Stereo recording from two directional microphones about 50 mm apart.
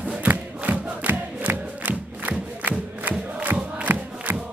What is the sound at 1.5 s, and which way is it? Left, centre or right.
Music, right.